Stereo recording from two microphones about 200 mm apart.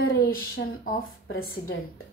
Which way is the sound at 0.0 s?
45° left (ahead or behind).